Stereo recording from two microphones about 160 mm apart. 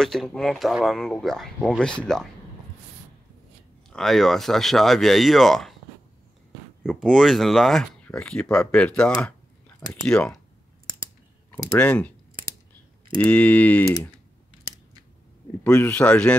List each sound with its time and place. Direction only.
0.0 s speech: 5° left (ahead or behind)
3.9 s speech: centre (ahead or behind)
6.8 s speech: centre (ahead or behind)
11.5 s speech: 10° left (ahead or behind)
13.2 s speech: 10° left (ahead or behind)
15.6 s speech: 5° left (ahead or behind)